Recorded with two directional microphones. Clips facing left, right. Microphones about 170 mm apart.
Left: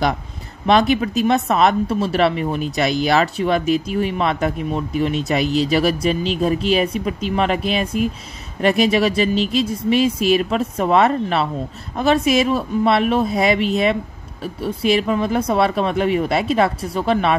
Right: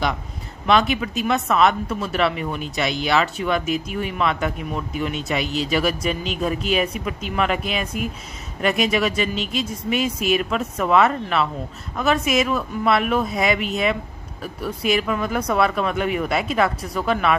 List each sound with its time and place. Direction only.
0.7 s speech: 40° left (ahead or behind)